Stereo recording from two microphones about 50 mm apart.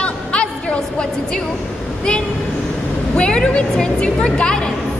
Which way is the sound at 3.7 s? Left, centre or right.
Centre.